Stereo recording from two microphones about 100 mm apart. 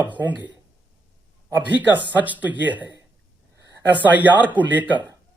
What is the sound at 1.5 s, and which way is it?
Speech, 15° right (ahead or behind).